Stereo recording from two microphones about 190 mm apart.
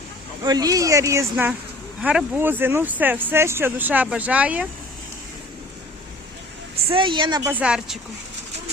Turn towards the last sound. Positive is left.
turn(degrees=-5)  # may be behind; listen again after turning